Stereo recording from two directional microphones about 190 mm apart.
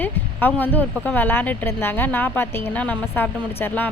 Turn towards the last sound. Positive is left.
turn(degrees=10)  # may be behind; listen again after turning